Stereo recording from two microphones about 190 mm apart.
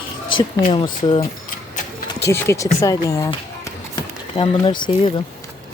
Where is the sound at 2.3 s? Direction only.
15° left (ahead or behind).